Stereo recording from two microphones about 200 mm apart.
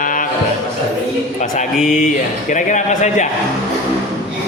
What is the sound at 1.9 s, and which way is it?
Speech, 40° left (ahead or behind).